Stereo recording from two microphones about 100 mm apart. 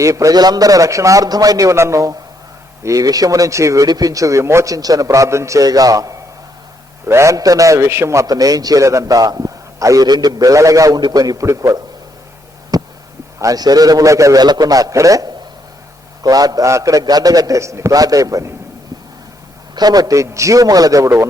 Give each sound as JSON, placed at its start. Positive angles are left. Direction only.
{"t": 0.0, "sound": "a man's voice", "side_deg": -30}
{"t": 12.7, "sound": "a sound", "side_deg": -40}
{"t": 13.4, "sound": "a man's voice", "side_deg": -40}
{"t": 19.7, "sound": "a man's voice", "side_deg": -40}